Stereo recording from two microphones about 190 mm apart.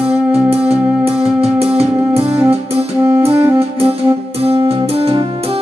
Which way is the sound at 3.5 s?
30° right (ahead or behind).